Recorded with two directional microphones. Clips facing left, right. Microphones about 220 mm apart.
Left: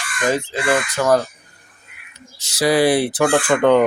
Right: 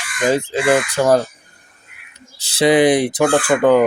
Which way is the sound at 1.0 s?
25° right (ahead or behind).